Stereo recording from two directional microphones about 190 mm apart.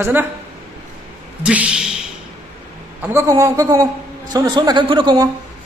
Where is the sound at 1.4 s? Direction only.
5° right (ahead or behind).